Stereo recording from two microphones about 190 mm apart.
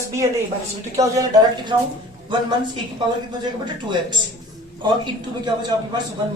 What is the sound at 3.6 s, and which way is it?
Speech, 25° right (ahead or behind).